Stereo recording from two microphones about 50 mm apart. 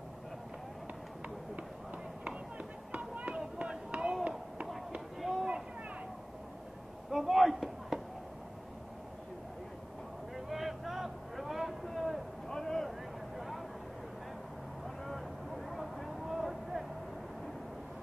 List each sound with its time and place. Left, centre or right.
2.2 s chop: right
5.2 s a sound: centre
7.1 s chop: centre
10.3 s vehicle: centre
12.4 s a sound: centre
15.0 s vehicle: centre